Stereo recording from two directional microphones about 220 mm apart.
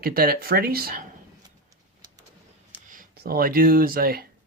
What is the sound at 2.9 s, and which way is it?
Speech, 40° right (ahead or behind).